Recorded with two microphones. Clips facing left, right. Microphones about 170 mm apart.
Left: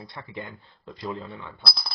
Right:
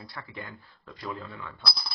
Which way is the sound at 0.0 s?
20° left (ahead or behind).